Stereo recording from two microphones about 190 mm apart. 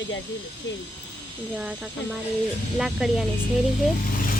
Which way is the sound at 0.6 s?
75° left (ahead or behind).